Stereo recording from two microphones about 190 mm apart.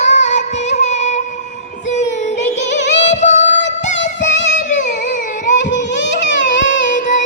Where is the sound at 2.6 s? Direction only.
70° left (ahead or behind).